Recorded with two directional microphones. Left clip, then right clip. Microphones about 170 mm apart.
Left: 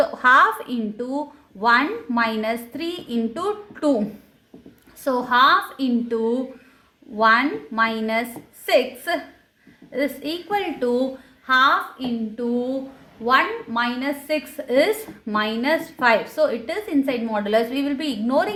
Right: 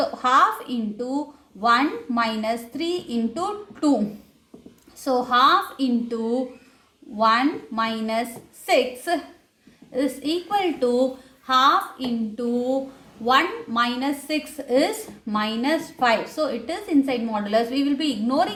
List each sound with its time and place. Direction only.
0.0 s a woman's voice: 35° left (ahead or behind)
5.0 s a woman's voice: 40° left (ahead or behind)